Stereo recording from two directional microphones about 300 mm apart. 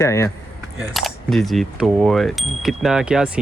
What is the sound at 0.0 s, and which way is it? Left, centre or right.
Speech, centre.